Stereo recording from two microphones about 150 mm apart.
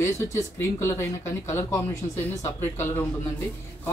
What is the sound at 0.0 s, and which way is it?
Speech, 20° left (ahead or behind).